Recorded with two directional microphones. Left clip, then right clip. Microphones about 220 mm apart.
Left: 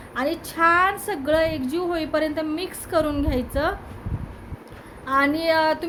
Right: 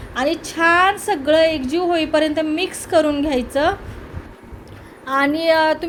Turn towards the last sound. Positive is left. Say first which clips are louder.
# right 5 dB
turn(degrees=-5)  # may be behind; listen again after turning